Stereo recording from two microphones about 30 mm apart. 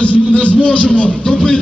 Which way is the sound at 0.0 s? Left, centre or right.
Left.